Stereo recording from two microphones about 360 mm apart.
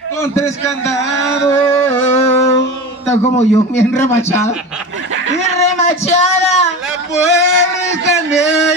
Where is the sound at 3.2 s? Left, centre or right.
Centre.